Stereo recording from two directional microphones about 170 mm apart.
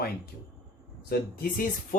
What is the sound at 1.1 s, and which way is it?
Speech, 55° left (ahead or behind).